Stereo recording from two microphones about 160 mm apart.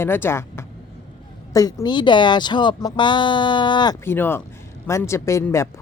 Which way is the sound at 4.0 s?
15° left (ahead or behind).